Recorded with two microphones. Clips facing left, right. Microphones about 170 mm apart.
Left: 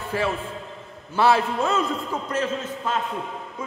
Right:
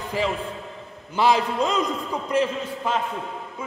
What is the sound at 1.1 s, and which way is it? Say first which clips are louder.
A man's voice: left 1 dB; 15° right (ahead or behind).